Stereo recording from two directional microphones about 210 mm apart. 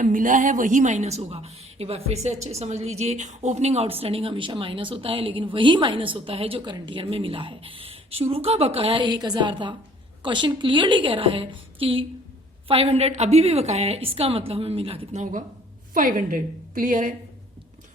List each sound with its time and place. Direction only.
0.0 s a woman's voice: 40° right (ahead or behind)